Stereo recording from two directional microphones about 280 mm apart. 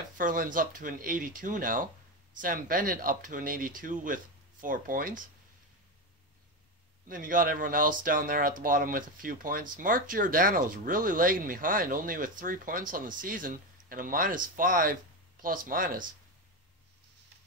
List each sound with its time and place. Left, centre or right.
0.2 s speech: right
7.1 s speech: right